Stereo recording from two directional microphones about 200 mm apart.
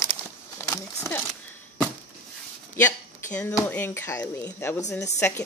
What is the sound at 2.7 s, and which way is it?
Speech, 10° left (ahead or behind).